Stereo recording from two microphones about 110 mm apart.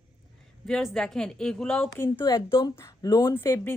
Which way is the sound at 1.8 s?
20° left (ahead or behind).